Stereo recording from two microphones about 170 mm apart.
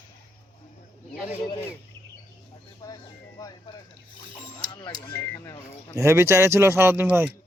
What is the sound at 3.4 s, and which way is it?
Speech, 25° left (ahead or behind).